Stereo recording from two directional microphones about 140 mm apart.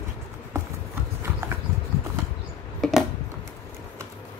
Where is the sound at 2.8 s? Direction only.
Centre (ahead or behind).